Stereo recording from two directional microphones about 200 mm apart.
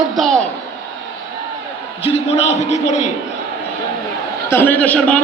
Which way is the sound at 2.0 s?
30° left (ahead or behind).